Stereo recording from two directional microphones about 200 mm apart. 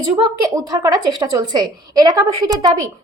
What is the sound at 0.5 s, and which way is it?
A woman's voice, 20° right (ahead or behind).